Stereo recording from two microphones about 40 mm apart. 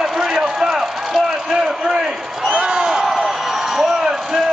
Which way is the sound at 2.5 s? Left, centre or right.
Centre.